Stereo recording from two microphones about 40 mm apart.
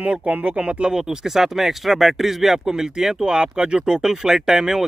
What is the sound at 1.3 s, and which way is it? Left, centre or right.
Speech, centre.